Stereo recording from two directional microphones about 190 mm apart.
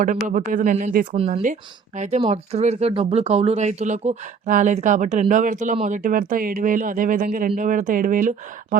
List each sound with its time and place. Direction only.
0.3 s speech: 45° right (ahead or behind)